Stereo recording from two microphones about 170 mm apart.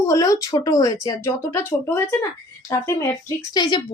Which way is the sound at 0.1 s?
20° left (ahead or behind).